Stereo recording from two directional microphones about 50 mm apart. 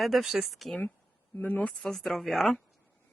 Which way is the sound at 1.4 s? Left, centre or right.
Left.